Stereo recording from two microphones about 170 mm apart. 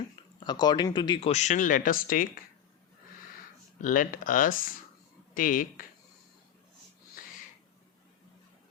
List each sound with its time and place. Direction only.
0.3 s speech: 25° left (ahead or behind); by 2.4 s 55° left (ahead or behind)
3.8 s speech: 50° left (ahead or behind)